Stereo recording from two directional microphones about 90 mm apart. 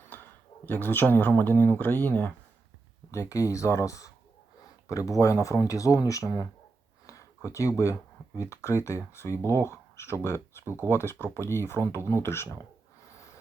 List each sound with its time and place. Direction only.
0.1 s speech: 20° left (ahead or behind)
3.1 s speech: 35° left (ahead or behind)
9.3 s speech: 30° right (ahead or behind)
9.6 s speech: 30° left (ahead or behind)
13.1 s a sound: 35° left (ahead or behind)